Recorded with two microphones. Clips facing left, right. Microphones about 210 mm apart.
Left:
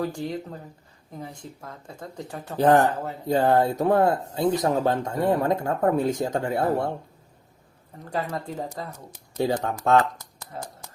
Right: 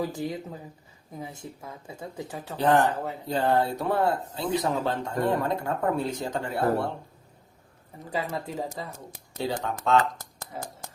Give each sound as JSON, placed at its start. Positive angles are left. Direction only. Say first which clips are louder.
{"t": 0.0, "sound": "speech", "louder": "left 2 dB", "side_deg": -5}
{"t": 2.6, "sound": "speech", "louder": "left 4 dB", "side_deg": 45}
{"t": 8.1, "sound": "speech", "louder": "left 1 dB", "side_deg": -5}
{"t": 9.4, "sound": "speech", "louder": "left 5 dB", "side_deg": 50}